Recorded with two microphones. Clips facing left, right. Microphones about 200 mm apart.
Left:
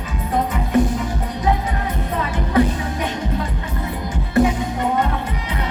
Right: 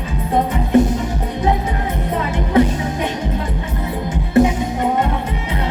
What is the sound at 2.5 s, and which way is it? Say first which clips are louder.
Music: right 3 dB; 25° right (ahead or behind).